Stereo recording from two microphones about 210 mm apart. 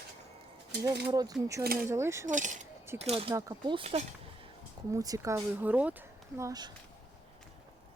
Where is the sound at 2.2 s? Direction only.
35° right (ahead or behind).